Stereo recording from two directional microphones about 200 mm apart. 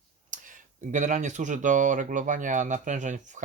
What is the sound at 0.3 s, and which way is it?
Speech, 40° right (ahead or behind).